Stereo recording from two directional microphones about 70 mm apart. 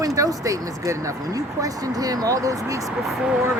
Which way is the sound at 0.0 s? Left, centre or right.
Right.